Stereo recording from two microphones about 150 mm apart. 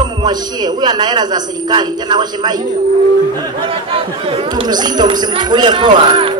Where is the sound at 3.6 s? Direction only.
40° right (ahead or behind).